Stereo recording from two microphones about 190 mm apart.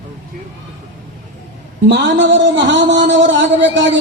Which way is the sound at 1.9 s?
70° right (ahead or behind).